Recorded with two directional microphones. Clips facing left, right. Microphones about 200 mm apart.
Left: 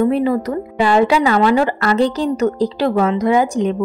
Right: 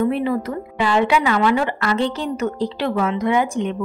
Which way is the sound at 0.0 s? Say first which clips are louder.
Left 4 dB; 40° left (ahead or behind).